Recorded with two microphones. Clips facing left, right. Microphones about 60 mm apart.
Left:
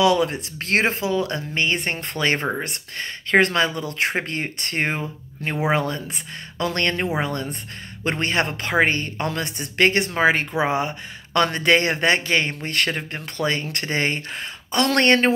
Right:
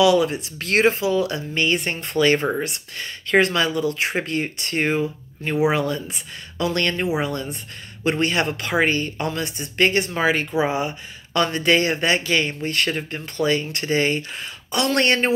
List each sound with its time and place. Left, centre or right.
0.0 s speech: left
10.1 s speech: left